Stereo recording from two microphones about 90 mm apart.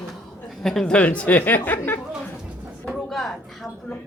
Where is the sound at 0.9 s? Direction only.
15° left (ahead or behind).